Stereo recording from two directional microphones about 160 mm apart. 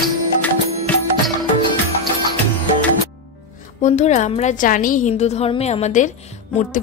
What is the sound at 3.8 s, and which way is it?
A woman's voice, 45° left (ahead or behind).